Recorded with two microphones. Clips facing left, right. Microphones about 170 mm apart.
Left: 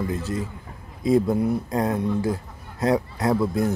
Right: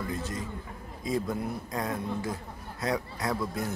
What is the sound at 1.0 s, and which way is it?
Speech, 30° left (ahead or behind).